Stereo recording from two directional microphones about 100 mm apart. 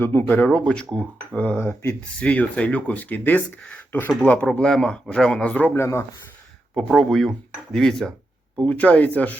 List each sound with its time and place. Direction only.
0.0 s speech: 20° left (ahead or behind)
5.7 s speech: 25° left (ahead or behind)
6.9 s speech: 5° left (ahead or behind)